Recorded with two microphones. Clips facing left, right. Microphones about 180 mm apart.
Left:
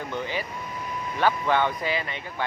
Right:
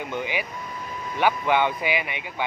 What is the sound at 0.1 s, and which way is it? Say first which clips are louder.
Speech: right 1 dB; 15° right (ahead or behind).